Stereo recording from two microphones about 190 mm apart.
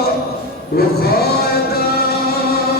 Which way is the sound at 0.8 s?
55° left (ahead or behind).